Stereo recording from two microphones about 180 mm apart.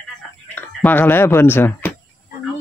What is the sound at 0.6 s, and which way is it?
Speech, 10° left (ahead or behind).